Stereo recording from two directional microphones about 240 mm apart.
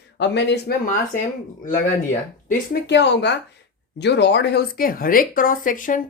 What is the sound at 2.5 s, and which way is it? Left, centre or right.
Speech, left.